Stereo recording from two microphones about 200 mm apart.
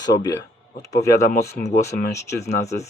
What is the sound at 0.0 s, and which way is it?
Speech, 20° left (ahead or behind).